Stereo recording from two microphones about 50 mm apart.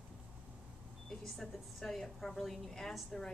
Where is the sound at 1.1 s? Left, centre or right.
Centre.